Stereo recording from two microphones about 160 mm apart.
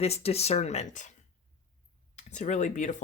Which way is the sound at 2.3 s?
45° left (ahead or behind).